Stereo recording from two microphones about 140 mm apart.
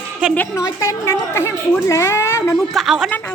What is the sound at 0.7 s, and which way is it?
A woman's voice, 20° left (ahead or behind).